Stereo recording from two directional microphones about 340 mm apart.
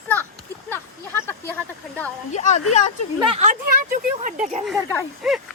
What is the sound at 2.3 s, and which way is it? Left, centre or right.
Speech, left.